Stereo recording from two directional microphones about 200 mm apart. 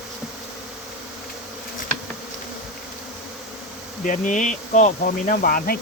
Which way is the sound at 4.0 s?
40° left (ahead or behind).